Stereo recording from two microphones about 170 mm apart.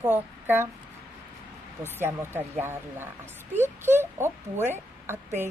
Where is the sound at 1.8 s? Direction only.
15° right (ahead or behind).